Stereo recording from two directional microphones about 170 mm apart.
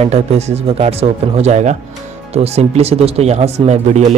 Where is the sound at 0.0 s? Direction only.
40° right (ahead or behind).